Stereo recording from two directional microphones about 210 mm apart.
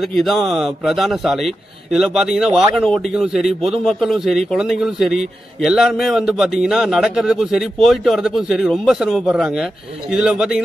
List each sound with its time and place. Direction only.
0.0 s a man's voice: centre (ahead or behind)